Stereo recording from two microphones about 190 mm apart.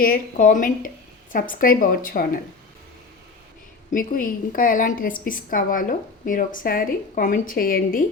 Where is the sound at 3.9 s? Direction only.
45° left (ahead or behind).